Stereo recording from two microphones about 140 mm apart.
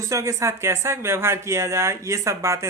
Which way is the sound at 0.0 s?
20° right (ahead or behind).